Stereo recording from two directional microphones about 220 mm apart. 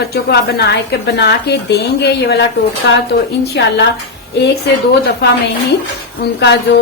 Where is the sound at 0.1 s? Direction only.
45° left (ahead or behind).